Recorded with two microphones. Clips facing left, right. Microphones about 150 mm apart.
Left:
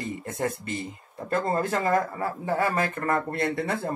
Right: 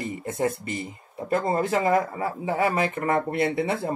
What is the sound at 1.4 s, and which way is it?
Speech, 15° right (ahead or behind).